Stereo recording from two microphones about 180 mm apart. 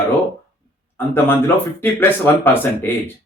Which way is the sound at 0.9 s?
10° left (ahead or behind).